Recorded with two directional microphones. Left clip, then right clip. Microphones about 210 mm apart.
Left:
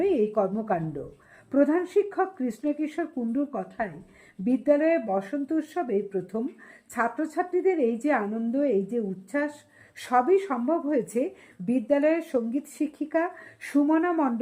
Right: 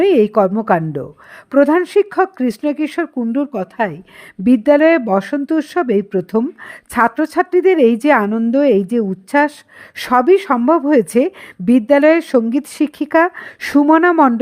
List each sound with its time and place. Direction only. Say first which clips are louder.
0.0 s speech: right 12 dB; 35° right (ahead or behind)